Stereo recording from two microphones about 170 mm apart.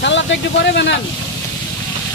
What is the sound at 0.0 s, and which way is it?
Speech, 90° left.